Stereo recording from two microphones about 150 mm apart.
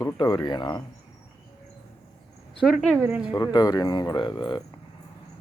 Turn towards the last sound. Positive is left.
turn(degrees=30)  # may be behind; listen again after turning